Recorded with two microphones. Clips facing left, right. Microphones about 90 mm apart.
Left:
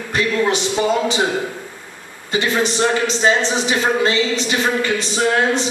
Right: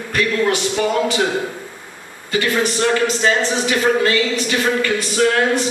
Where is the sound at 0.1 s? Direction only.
20° left (ahead or behind).